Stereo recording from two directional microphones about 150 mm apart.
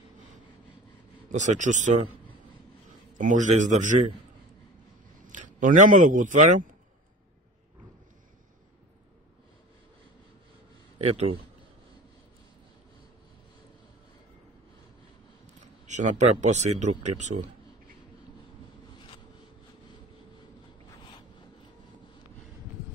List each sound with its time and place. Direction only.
1.3 s speech: 50° right (ahead or behind)
3.2 s a man's voice: 55° right (ahead or behind)
5.2 s speech: 55° right (ahead or behind)
11.0 s a man's voice: 45° right (ahead or behind)
15.9 s speech: 55° right (ahead or behind)